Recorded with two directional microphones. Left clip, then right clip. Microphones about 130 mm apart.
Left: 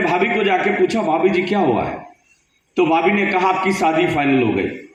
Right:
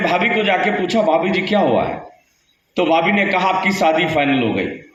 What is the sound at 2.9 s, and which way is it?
Speech, 35° right (ahead or behind).